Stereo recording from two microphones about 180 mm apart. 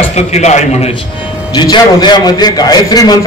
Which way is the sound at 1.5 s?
25° left (ahead or behind).